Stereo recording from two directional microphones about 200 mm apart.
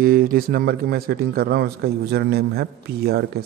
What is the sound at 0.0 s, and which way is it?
A man's voice, 45° right (ahead or behind).